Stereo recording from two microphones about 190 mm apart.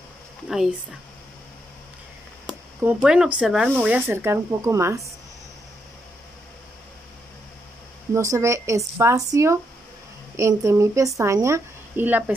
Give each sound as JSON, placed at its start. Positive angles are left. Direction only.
{"t": 0.5, "sound": "speech", "side_deg": -5}
{"t": 2.8, "sound": "a woman's voice", "side_deg": -5}
{"t": 8.1, "sound": "a woman's voice", "side_deg": -15}